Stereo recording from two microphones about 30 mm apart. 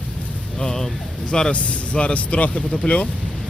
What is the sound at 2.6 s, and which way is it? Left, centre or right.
Speech, left.